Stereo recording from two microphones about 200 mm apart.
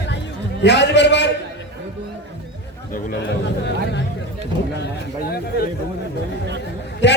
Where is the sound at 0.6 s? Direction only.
60° left (ahead or behind).